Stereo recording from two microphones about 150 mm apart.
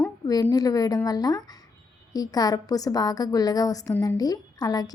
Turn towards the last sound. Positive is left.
turn(degrees=25)  # may be behind; listen again after turning